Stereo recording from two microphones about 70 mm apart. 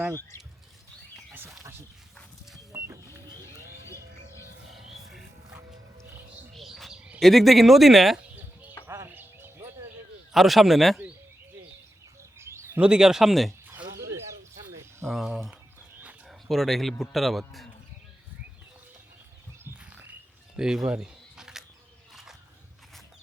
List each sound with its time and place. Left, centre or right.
2.7 s printer: right
4.7 s music: centre
6.5 s bird: centre
6.9 s bird: centre
7.2 s a man's voice: centre
9.0 s music: right
10.3 s a man's voice: centre
12.4 s bird: right
12.8 s speech: centre
14.0 s a sound: right
15.0 s a man's voice: centre
20.6 s a sound: centre